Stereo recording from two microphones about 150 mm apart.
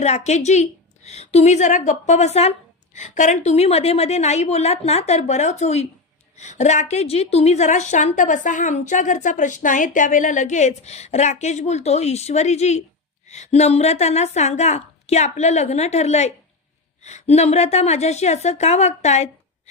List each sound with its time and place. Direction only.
0.0 s a woman's voice: 50° left (ahead or behind)